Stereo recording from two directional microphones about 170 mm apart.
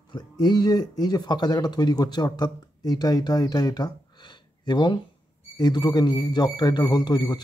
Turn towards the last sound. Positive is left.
turn(degrees=25)  # may be behind; listen again after turning